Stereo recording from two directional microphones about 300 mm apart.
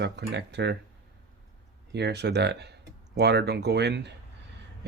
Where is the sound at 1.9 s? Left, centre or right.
Right.